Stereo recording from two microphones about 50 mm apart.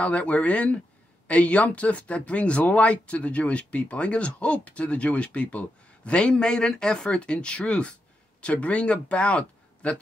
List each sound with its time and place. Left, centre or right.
0.0 s speech: left